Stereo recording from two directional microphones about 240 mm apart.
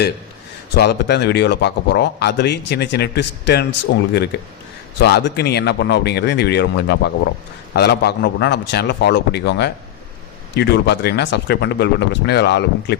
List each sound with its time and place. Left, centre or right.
0.8 s speech: left